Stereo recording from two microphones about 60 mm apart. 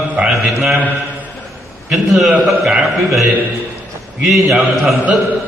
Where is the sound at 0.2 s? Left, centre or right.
Centre.